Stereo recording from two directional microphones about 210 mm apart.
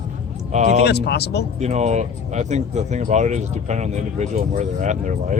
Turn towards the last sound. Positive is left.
turn(degrees=-35)  # may be behind; listen again after turning